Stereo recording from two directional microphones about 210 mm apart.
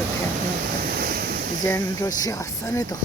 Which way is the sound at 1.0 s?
45° right (ahead or behind).